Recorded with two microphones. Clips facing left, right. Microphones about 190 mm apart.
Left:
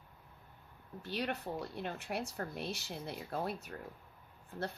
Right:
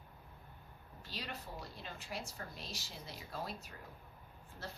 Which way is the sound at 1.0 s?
60° left (ahead or behind).